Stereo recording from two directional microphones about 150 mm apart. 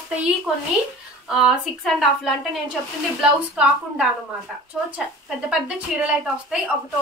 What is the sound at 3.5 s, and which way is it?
Speech, 5° right (ahead or behind).